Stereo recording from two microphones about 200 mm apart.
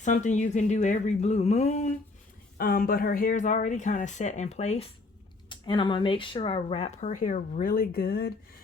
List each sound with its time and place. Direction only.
0.0 s speech: 35° left (ahead or behind)
2.6 s speech: 45° left (ahead or behind)